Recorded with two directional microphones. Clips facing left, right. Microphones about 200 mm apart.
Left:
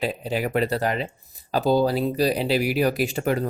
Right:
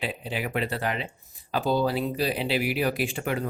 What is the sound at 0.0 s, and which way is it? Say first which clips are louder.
Speech: left 6 dB; 40° left (ahead or behind).